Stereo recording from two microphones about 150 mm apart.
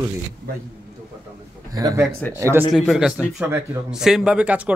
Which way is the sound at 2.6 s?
Centre (ahead or behind).